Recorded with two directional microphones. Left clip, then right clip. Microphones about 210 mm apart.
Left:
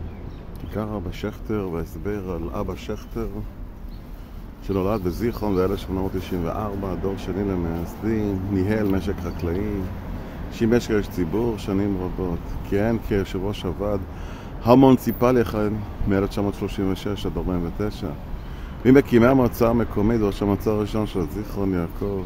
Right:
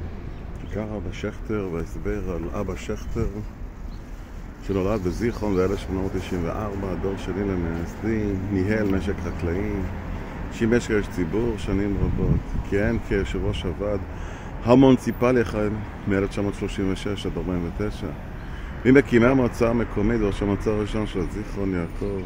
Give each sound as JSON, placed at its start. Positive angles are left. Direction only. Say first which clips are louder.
{"t": 0.7, "sound": "speech", "louder": "left 2 dB", "side_deg": 15}
{"t": 4.6, "sound": "speech", "louder": "left 1 dB", "side_deg": 10}